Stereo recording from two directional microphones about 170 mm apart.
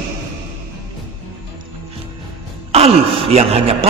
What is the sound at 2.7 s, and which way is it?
A man's voice, 35° right (ahead or behind).